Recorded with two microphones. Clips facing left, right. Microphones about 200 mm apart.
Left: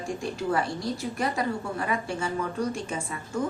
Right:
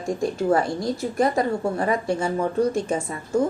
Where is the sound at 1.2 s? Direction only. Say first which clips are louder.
Right 9 dB; 45° right (ahead or behind).